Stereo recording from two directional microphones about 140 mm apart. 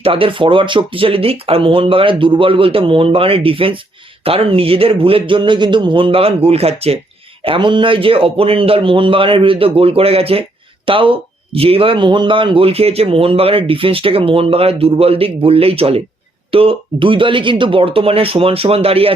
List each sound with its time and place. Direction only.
0.0 s speech: 40° right (ahead or behind)